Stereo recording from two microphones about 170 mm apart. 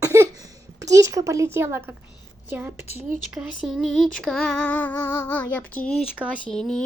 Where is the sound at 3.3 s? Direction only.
Centre (ahead or behind).